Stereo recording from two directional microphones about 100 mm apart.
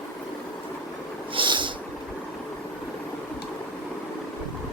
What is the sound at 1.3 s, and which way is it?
Snort, 55° right (ahead or behind).